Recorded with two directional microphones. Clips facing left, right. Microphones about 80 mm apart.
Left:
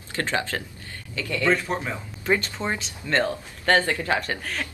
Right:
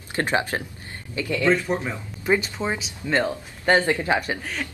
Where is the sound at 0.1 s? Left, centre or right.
Right.